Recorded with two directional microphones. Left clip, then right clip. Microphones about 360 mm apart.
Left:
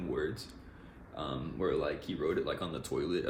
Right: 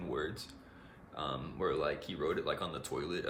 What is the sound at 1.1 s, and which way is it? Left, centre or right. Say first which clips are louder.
Speech: even; centre.